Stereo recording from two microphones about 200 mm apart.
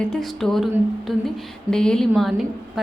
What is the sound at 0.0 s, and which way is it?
A woman's voice, centre (ahead or behind).